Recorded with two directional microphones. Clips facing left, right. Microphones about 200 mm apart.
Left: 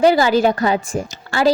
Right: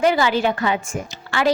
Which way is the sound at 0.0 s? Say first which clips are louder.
Left 5 dB; 35° left (ahead or behind).